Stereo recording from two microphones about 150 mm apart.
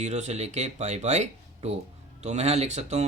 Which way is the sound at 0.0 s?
50° right (ahead or behind).